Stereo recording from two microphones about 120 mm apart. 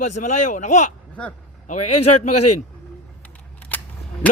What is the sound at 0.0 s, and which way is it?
Speech, 90° left.